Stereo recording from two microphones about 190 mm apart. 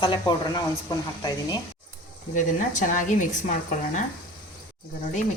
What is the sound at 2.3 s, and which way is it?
Speech, 40° left (ahead or behind).